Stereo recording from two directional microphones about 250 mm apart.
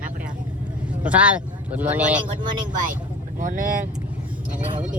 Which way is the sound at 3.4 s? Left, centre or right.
Right.